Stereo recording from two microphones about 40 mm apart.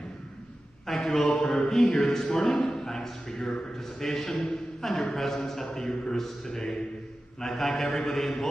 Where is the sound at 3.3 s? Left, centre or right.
Left.